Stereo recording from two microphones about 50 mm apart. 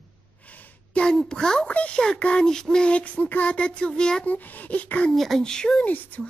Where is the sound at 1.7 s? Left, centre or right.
Left.